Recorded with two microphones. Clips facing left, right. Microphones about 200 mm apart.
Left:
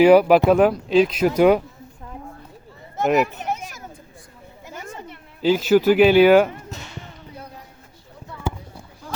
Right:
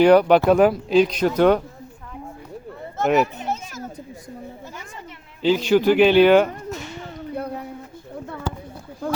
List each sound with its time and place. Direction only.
0.0 s speech: 5° left (ahead or behind)
3.0 s speech: centre (ahead or behind)
3.4 s children playing: 15° left (ahead or behind)
5.4 s speech: 5° left (ahead or behind)
7.3 s a sound: 60° right (ahead or behind)